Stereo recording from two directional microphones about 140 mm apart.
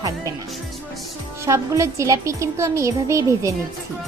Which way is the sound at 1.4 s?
20° right (ahead or behind).